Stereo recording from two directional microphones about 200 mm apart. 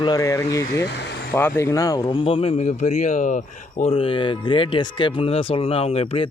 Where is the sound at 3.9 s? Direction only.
25° left (ahead or behind).